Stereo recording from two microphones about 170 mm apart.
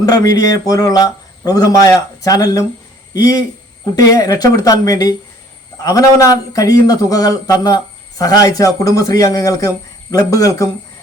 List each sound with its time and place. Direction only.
0.0 s speech: 20° left (ahead or behind)